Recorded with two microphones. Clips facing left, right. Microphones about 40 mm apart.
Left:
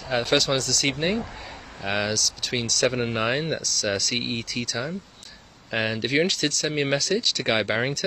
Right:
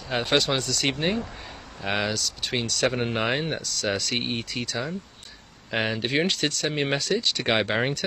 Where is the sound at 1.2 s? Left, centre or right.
Centre.